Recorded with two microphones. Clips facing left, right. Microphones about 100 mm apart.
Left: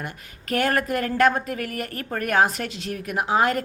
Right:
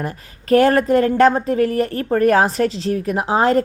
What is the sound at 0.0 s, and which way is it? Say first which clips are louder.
Speech: right 8 dB; 35° right (ahead or behind).